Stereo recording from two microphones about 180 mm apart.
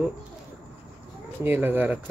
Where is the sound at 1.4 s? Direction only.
10° right (ahead or behind).